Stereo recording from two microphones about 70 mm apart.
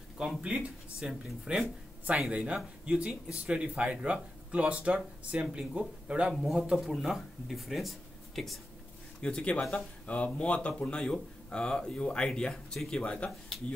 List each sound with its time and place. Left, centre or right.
0.4 s speech: centre
6.3 s speech: centre
9.2 s speech: centre